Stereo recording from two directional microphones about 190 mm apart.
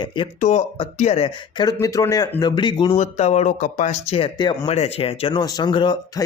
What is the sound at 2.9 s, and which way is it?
Speech, 35° left (ahead or behind).